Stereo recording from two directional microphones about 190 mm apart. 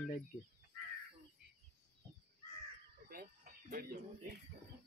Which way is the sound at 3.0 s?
50° right (ahead or behind).